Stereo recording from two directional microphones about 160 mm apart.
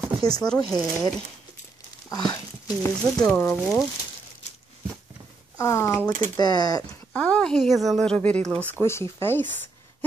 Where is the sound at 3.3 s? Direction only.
10° left (ahead or behind).